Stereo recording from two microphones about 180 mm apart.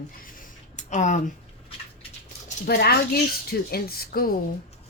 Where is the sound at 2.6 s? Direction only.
60° left (ahead or behind).